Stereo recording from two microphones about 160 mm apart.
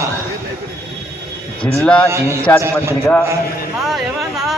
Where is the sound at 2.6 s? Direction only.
15° right (ahead or behind).